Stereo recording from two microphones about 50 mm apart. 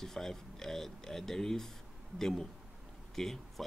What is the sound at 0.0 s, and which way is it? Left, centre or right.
Speech, centre.